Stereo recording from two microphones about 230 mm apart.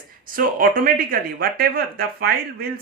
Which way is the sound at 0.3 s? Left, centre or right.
Right.